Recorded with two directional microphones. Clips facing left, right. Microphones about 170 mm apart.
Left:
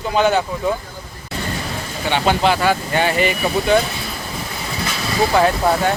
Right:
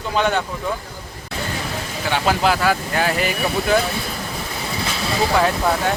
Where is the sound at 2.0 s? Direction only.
Centre (ahead or behind).